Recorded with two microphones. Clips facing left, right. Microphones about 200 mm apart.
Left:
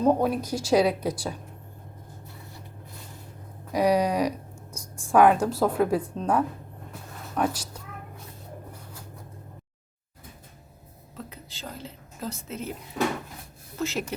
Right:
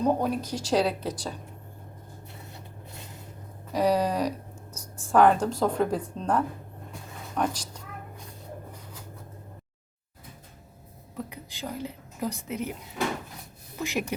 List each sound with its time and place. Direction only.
0.2 s speech: 10° left (ahead or behind)
2.2 s vehicle: 25° right (ahead or behind)
3.7 s a woman's voice: 10° left (ahead or behind)
8.7 s a sound: 10° left (ahead or behind)
11.2 s a woman's voice: 15° right (ahead or behind)
13.7 s speech: 15° right (ahead or behind)